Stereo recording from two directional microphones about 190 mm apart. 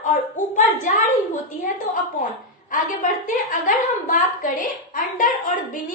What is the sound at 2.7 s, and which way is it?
A woman's voice, 45° left (ahead or behind).